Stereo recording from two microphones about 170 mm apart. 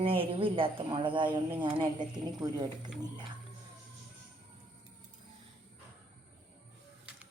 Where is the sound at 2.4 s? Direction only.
25° right (ahead or behind).